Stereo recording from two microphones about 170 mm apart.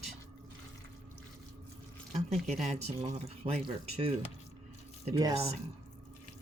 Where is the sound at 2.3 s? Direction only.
40° right (ahead or behind).